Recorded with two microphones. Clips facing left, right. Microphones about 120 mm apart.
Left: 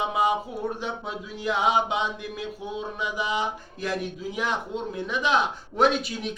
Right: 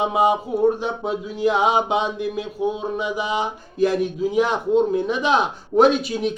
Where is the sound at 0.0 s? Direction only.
25° right (ahead or behind).